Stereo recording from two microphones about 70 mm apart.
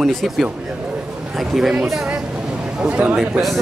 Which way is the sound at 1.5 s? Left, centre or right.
Centre.